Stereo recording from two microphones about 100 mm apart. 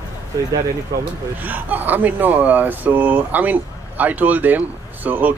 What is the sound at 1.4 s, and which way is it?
Speech, 20° right (ahead or behind).